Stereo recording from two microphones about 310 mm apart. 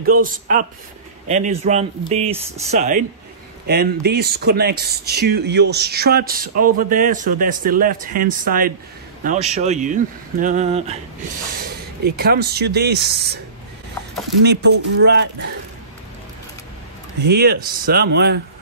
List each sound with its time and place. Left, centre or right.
0.0 s a man's voice: right
14.4 s speech: right
17.2 s speech: right